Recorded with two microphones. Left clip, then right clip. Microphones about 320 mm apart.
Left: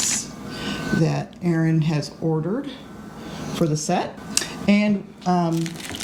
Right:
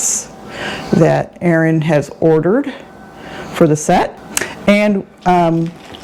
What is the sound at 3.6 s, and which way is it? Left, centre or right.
Speech, right.